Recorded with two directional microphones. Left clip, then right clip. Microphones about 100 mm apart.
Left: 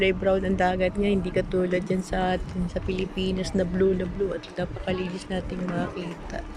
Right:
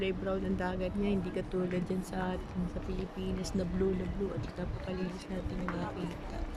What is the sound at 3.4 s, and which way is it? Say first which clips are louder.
Speech: left 10 dB; 10° left (ahead or behind).